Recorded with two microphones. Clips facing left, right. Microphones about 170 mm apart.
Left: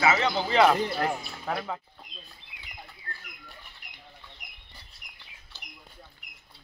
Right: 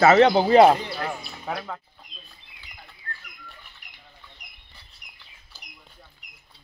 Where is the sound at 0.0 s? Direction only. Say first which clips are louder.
Right 9 dB; 60° right (ahead or behind).